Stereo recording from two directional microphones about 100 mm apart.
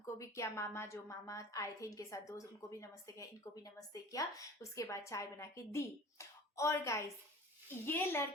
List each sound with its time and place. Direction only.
0.0 s a woman's voice: 30° left (ahead or behind)